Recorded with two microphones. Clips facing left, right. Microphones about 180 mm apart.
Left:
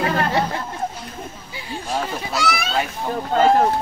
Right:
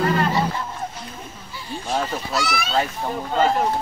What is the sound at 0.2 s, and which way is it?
Speech, 70° left (ahead or behind).